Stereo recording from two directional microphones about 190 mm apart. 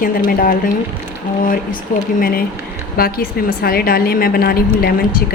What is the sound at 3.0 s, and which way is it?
A woman's voice, 50° left (ahead or behind).